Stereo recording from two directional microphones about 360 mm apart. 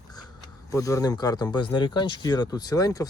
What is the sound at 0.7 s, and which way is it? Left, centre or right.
Speech, centre.